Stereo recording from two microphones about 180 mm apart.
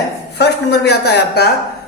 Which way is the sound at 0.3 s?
70° left (ahead or behind).